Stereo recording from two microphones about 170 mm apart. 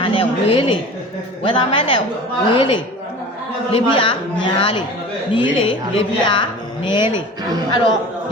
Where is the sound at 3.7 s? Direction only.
30° left (ahead or behind).